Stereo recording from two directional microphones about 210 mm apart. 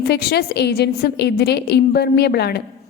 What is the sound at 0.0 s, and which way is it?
A woman's voice, 50° left (ahead or behind).